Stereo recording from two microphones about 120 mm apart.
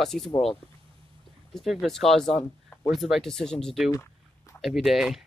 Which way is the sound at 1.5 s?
Centre (ahead or behind).